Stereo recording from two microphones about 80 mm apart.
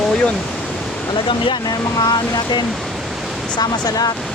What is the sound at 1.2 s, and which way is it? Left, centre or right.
Speech, left.